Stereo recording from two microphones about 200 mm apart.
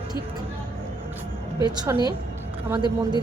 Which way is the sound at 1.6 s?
20° right (ahead or behind).